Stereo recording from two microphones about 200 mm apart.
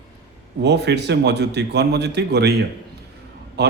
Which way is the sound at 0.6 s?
60° right (ahead or behind).